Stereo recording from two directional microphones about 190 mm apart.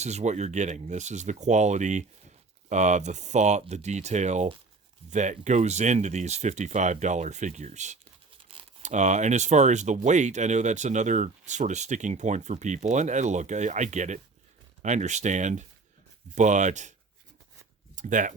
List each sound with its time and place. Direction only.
0.0 s speech: 35° right (ahead or behind)
17.9 s speech: 40° right (ahead or behind)